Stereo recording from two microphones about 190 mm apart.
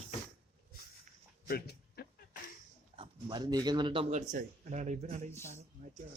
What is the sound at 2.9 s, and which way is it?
Speech, 25° right (ahead or behind).